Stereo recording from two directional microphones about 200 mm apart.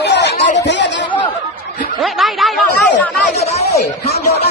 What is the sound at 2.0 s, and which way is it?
Snicker, centre (ahead or behind).